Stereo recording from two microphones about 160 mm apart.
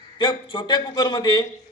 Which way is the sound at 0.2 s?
30° left (ahead or behind).